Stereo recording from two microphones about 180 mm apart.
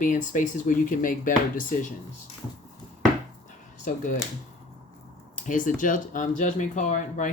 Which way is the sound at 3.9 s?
45° left (ahead or behind).